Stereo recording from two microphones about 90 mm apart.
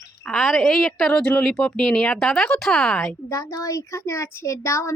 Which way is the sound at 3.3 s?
35° left (ahead or behind).